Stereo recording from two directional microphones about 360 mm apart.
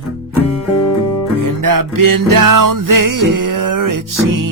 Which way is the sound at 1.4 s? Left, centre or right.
Right.